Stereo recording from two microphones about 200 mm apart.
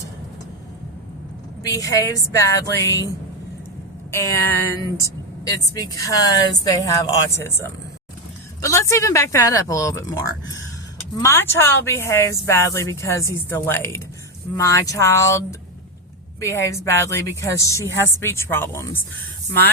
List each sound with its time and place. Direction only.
1.7 s speech: 15° left (ahead or behind)
4.1 s speech: 15° left (ahead or behind)